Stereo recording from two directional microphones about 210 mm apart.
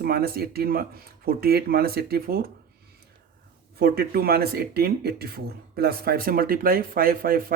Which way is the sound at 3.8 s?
45° right (ahead or behind).